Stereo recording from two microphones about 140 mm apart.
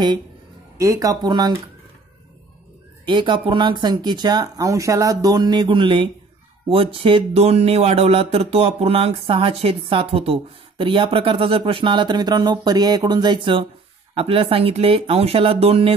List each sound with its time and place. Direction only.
0.7 s speech: 20° right (ahead or behind)
3.1 s speech: 35° right (ahead or behind)